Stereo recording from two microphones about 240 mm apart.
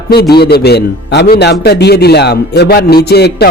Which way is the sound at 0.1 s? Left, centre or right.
Left.